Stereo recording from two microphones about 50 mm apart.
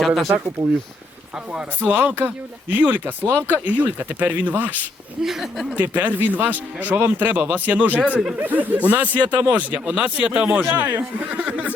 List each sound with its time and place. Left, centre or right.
0.0 s speech: centre
1.8 s speech: right
5.2 s speech: centre
5.7 s speech: right